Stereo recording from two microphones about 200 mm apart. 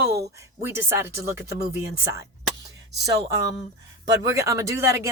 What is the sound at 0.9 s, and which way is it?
Speech, 15° right (ahead or behind).